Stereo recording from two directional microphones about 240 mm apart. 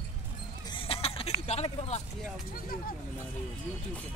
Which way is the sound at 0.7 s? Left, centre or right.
Left.